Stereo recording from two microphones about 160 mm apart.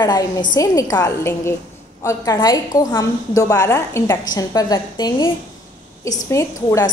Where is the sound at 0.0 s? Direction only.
25° left (ahead or behind).